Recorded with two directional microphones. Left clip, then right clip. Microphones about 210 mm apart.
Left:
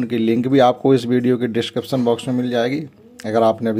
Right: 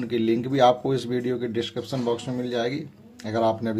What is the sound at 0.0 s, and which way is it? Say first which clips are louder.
Speech: left 5 dB; 35° left (ahead or behind).